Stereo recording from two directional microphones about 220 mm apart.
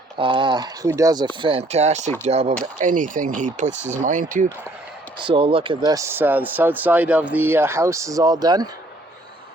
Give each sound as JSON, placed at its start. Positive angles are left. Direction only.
{"t": 0.2, "sound": "speech", "side_deg": -20}
{"t": 5.2, "sound": "speech", "side_deg": -25}